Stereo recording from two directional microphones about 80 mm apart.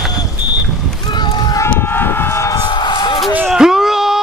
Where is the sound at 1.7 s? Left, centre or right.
Left.